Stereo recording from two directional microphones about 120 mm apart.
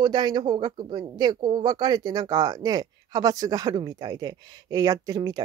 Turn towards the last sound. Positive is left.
turn(degrees=-30)  # may be behind; listen again after turning